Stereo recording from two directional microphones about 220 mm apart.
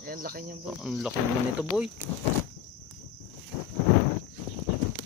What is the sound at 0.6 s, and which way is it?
Speech, centre (ahead or behind).